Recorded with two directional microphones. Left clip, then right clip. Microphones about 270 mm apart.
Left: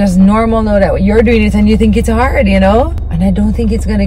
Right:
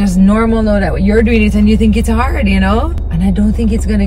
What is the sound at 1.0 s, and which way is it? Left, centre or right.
Speech, centre.